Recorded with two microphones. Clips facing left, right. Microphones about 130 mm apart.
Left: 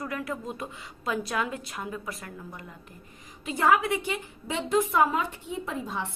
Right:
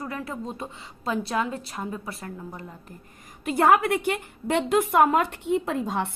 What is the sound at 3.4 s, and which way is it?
A woman's voice, 55° right (ahead or behind).